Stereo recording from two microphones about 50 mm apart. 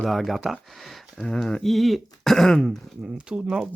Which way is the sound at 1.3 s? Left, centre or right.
Centre.